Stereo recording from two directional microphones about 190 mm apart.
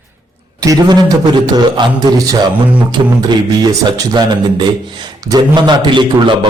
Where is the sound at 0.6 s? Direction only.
20° right (ahead or behind).